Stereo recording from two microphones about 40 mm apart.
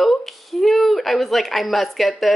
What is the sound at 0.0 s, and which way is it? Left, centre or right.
Speech, centre.